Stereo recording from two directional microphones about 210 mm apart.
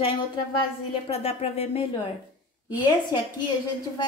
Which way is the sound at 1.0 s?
30° left (ahead or behind).